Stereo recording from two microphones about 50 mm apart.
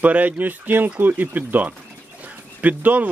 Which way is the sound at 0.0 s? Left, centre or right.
Right.